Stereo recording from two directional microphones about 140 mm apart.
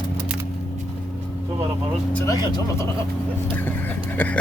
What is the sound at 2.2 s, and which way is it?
Speech, 25° left (ahead or behind).